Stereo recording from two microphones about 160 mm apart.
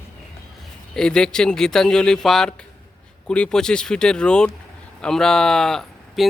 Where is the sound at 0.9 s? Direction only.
5° left (ahead or behind).